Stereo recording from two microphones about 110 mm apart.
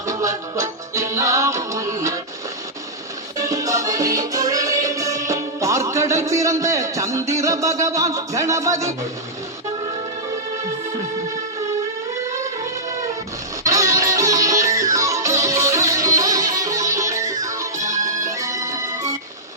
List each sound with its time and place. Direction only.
0.0 s music: 30° right (ahead or behind)
3.4 s music: 30° right (ahead or behind)
13.7 s music: 30° right (ahead or behind)